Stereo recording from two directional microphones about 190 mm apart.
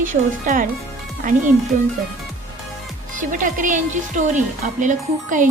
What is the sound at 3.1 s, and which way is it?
Speech, 45° right (ahead or behind).